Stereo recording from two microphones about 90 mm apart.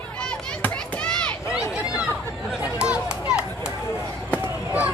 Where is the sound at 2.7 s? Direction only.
10° right (ahead or behind).